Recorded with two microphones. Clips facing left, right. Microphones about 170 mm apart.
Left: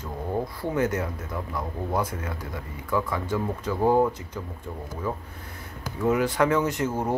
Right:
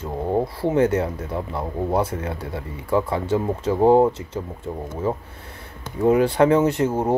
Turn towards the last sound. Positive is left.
turn(degrees=-30)  # may be behind; listen again after turning